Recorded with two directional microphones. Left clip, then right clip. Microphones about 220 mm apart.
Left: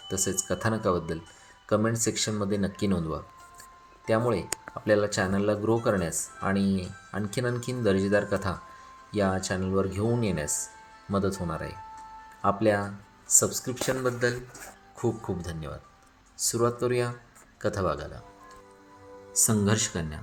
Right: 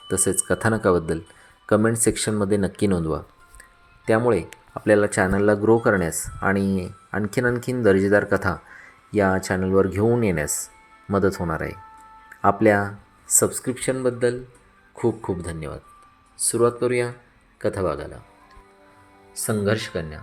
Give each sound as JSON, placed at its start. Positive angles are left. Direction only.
{"t": 0.1, "sound": "speech", "side_deg": -30}
{"t": 19.3, "sound": "speech", "side_deg": 0}